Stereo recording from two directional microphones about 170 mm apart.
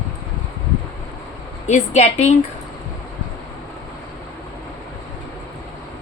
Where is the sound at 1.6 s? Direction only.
45° left (ahead or behind).